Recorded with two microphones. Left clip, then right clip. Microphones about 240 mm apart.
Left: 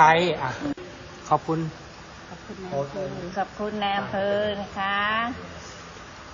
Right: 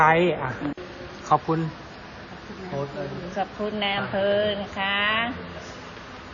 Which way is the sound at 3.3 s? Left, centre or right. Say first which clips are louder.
Right 1 dB; centre.